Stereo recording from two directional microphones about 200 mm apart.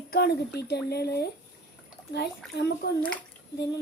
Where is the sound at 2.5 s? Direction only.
55° left (ahead or behind).